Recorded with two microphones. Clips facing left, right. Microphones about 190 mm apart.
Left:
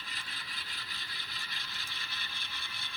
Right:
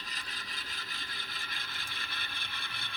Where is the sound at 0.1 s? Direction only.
45° right (ahead or behind).